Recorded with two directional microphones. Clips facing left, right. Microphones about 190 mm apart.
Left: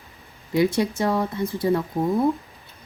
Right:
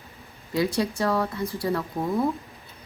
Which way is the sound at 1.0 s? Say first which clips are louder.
Left 2 dB; 20° left (ahead or behind).